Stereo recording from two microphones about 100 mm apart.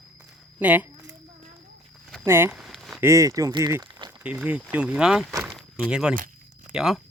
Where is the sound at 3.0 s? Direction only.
30° right (ahead or behind).